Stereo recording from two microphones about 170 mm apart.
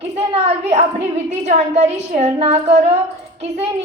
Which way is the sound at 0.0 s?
40° right (ahead or behind).